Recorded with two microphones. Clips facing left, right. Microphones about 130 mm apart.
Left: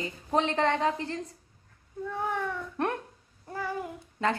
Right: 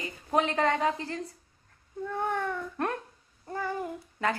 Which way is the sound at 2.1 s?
5° left (ahead or behind).